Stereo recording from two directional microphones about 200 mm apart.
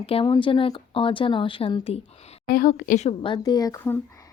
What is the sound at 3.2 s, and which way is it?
Speech, 20° left (ahead or behind).